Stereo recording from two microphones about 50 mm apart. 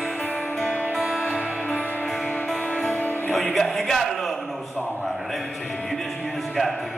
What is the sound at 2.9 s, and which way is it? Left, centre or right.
Music, left.